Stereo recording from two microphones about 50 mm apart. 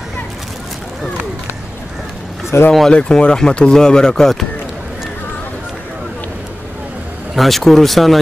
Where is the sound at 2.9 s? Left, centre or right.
Centre.